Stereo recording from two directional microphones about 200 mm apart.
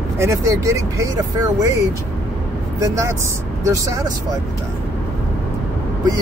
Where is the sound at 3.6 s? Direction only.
15° right (ahead or behind).